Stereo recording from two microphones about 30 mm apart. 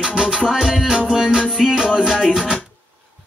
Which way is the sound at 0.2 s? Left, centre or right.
Centre.